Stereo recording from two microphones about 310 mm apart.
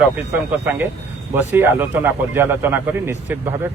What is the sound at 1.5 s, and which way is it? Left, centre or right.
Speech, centre.